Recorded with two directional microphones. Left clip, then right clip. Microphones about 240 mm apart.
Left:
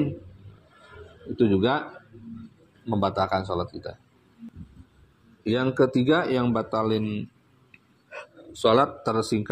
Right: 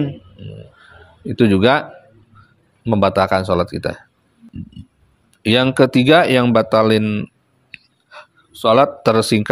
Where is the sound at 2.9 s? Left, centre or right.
Right.